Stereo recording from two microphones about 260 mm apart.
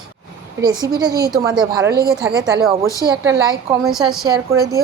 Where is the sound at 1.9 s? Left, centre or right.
Right.